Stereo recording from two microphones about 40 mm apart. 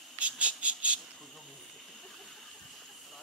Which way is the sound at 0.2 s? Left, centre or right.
Right.